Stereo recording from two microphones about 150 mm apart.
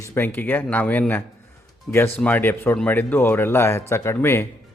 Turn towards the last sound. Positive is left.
turn(degrees=15)  # may be behind; listen again after turning